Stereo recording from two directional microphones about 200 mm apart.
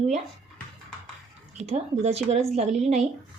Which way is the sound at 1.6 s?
35° right (ahead or behind).